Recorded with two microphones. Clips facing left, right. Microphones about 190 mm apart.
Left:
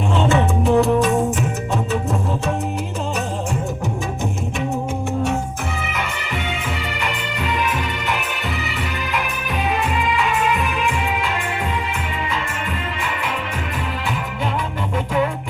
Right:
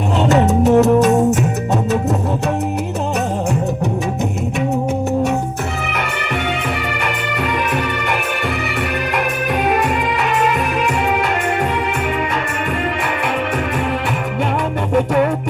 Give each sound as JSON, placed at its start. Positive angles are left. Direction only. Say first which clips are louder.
{"t": 0.2, "sound": "music", "louder": "right 6 dB", "side_deg": -40}
{"t": 11.1, "sound": "music", "louder": "right 6 dB", "side_deg": -65}
{"t": 14.9, "sound": "music", "louder": "right 6 dB", "side_deg": -50}